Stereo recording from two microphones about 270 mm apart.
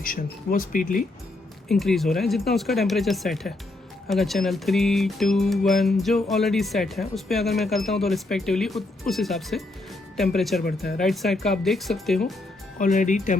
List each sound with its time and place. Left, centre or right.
0.0 s speech: left
1.6 s speech: centre
10.6 s speech: left
11.0 s speech: centre
12.8 s speech: left